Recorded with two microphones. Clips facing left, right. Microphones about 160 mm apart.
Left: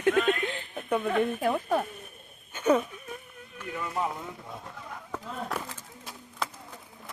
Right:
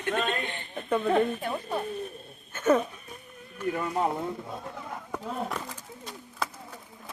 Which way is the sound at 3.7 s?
45° right (ahead or behind).